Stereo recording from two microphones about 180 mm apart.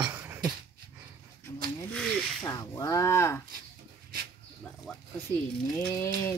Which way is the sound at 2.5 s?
20° left (ahead or behind).